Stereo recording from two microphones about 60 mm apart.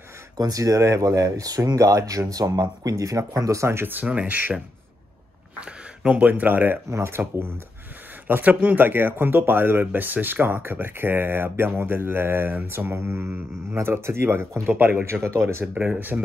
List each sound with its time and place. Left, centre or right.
0.4 s speech: right
3.6 s speech: right
3.9 s speech: right
5.6 s speech: right
6.9 s speech: right
8.3 s speech: right
15.0 s speech: right
15.7 s speech: right